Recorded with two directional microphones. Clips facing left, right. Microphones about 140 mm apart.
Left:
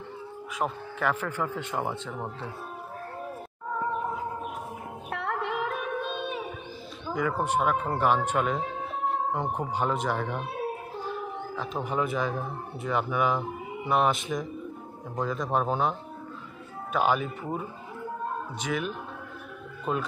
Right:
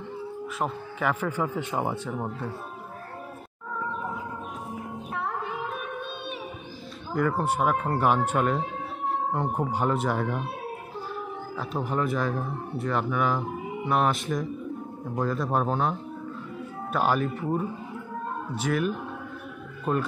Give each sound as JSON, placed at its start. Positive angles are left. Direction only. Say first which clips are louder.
{"t": 0.6, "sound": "speech", "louder": "left 1 dB", "side_deg": -5}
{"t": 5.1, "sound": "music", "louder": "left 2 dB", "side_deg": 75}
{"t": 7.2, "sound": "speech", "louder": "right 2 dB", "side_deg": 0}
{"t": 11.5, "sound": "speech", "louder": "right 1 dB", "side_deg": -5}